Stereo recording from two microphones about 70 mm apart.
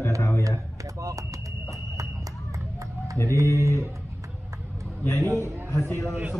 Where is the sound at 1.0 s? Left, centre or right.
Right.